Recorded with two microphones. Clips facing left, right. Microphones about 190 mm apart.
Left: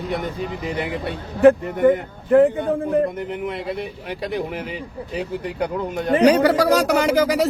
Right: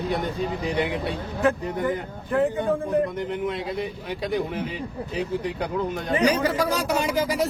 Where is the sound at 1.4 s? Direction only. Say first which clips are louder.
Left 10 dB; 60° left (ahead or behind).